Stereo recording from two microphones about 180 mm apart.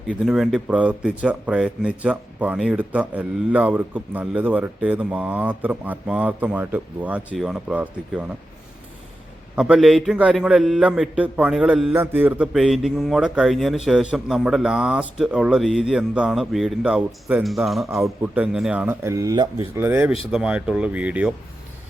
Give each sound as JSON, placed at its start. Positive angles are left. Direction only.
{"t": 0.3, "sound": "speech", "side_deg": 0}
{"t": 9.6, "sound": "a man's voice", "side_deg": -5}
{"t": 17.8, "sound": "speech", "side_deg": -15}
{"t": 18.5, "sound": "speech", "side_deg": -5}